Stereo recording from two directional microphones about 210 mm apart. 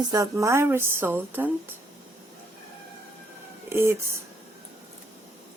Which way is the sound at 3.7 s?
10° right (ahead or behind).